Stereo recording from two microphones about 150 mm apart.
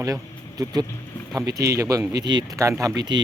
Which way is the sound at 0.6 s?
25° right (ahead or behind).